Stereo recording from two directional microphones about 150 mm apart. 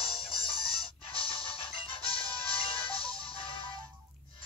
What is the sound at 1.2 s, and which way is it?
Music, 35° left (ahead or behind).